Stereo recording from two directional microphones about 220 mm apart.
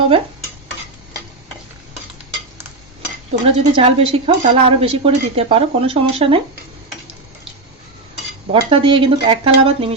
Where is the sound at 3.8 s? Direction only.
25° right (ahead or behind).